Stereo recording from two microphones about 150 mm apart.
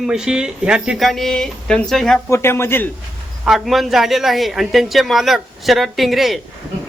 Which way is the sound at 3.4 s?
Centre (ahead or behind).